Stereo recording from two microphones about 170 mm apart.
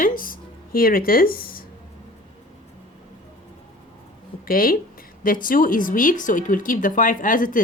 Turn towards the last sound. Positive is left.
turn(degrees=55)  # may be behind; listen again after turning